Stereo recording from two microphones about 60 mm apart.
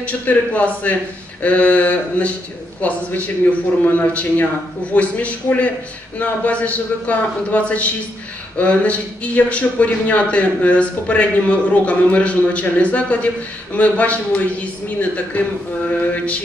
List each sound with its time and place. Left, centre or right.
0.0 s a man's voice: left